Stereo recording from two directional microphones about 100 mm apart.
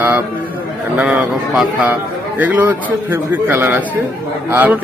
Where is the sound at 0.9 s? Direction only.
15° right (ahead or behind).